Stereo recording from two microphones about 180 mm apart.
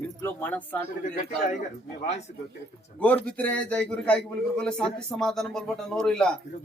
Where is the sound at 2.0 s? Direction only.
40° left (ahead or behind).